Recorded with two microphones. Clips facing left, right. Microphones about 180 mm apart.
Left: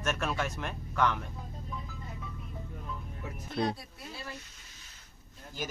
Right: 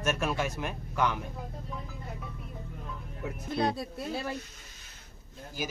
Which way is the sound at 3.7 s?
70° right (ahead or behind).